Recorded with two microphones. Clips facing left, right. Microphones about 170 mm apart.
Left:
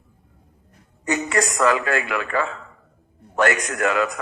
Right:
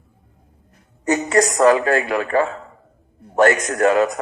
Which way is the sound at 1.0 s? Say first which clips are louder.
Right 5 dB; 40° right (ahead or behind).